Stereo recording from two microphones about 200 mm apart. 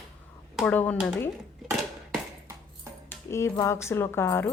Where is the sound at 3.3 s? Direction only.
15° left (ahead or behind).